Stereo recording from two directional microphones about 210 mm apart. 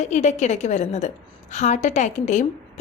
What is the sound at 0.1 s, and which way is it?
A woman's voice, 35° left (ahead or behind).